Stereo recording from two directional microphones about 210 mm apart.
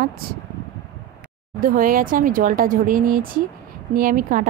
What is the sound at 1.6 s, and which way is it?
Speech, 40° right (ahead or behind).